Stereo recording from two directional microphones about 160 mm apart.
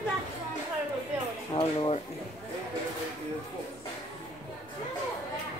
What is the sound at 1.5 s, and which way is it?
Speech, 35° left (ahead or behind).